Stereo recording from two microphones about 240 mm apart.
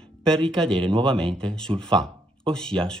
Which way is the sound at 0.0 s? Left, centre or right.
Centre.